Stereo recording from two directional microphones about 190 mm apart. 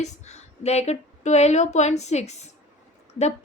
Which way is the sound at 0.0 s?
35° left (ahead or behind).